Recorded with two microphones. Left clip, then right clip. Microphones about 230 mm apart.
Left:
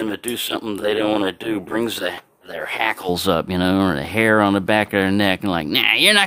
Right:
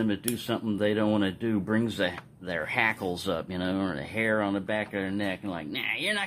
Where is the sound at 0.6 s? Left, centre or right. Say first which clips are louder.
Left 6 dB; left.